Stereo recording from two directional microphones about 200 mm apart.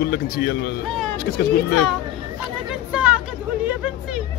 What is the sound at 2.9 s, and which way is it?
Chatter, 5° right (ahead or behind).